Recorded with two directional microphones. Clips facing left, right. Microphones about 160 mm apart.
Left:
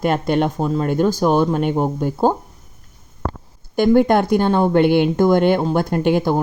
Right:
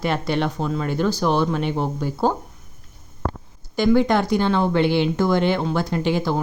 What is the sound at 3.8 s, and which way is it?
Speech, 50° left (ahead or behind).